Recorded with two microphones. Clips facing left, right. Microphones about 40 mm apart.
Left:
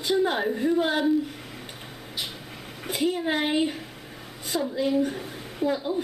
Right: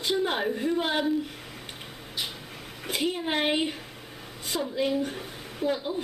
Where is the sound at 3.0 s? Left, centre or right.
Centre.